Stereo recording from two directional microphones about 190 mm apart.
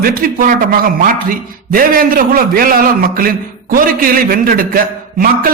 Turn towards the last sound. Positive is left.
turn(degrees=-50)  # may be behind; listen again after turning